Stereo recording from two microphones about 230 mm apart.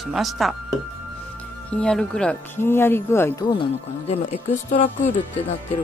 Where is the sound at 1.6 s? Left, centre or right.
Centre.